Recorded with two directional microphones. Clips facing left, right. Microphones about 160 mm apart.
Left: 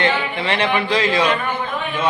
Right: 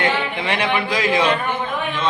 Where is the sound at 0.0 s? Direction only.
10° right (ahead or behind).